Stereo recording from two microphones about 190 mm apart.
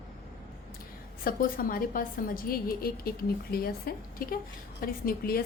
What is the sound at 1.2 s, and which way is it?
A woman's voice, 50° left (ahead or behind).